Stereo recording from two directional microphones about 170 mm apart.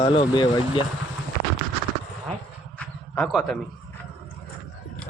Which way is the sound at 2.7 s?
5° left (ahead or behind).